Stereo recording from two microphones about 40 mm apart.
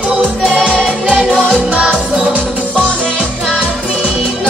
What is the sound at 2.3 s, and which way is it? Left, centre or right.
Music, right.